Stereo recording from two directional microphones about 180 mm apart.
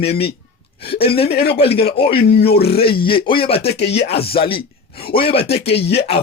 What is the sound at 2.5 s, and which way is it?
Speech, 60° left (ahead or behind).